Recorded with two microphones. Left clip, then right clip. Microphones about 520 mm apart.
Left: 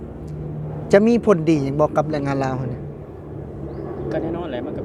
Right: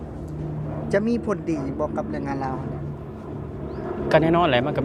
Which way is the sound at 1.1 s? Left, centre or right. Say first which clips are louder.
Left 9 dB; left.